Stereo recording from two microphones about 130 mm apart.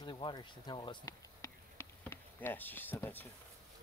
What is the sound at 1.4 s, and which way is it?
Insect, 20° left (ahead or behind).